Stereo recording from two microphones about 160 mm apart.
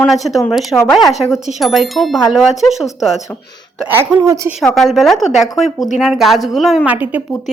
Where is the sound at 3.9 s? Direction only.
10° right (ahead or behind).